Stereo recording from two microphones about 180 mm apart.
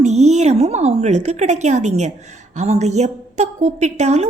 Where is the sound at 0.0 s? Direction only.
40° right (ahead or behind).